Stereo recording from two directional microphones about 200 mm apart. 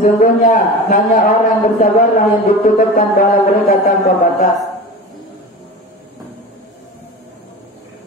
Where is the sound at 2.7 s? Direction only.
40° left (ahead or behind).